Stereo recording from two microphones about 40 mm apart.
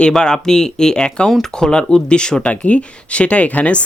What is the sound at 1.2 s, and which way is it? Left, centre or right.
Speech, centre.